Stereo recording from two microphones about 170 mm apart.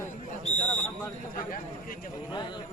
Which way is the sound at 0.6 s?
10° left (ahead or behind).